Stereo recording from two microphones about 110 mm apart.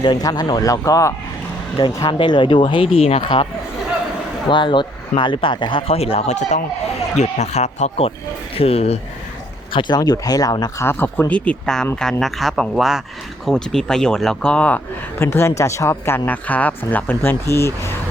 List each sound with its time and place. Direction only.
0.0 s speech: 40° left (ahead or behind)
2.0 s a man's voice: 45° left (ahead or behind)
4.4 s a man's voice: 45° left (ahead or behind); by 8.1 s 75° left (ahead or behind)
8.5 s speech: 65° left (ahead or behind)
9.7 s speech: 40° left (ahead or behind)
10.8 s speech: 20° left (ahead or behind)
15.2 s speech: 20° left (ahead or behind)